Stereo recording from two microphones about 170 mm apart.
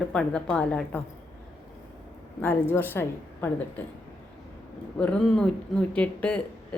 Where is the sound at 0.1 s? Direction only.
5° left (ahead or behind).